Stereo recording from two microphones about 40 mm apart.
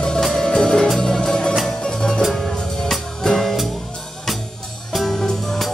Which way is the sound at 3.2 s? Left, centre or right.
Centre.